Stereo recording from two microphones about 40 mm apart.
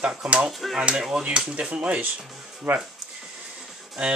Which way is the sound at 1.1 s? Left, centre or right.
Right.